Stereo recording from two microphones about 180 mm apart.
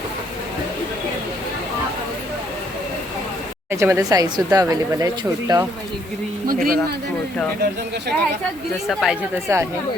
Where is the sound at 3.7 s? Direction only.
15° right (ahead or behind).